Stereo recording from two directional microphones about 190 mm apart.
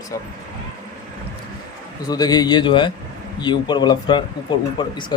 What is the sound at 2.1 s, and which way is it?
Speech, 20° left (ahead or behind).